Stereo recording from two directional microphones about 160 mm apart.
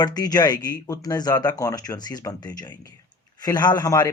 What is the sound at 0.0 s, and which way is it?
Speech, 25° left (ahead or behind).